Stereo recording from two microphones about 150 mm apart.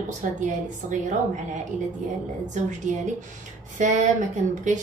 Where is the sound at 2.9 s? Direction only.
55° right (ahead or behind).